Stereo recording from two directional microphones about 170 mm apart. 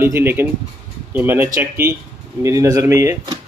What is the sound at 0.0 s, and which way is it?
Speech, 15° right (ahead or behind).